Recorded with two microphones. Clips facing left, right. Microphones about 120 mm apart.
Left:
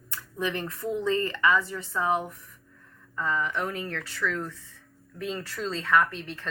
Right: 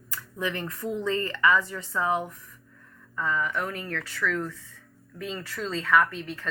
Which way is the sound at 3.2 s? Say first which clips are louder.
Even; 25° left (ahead or behind).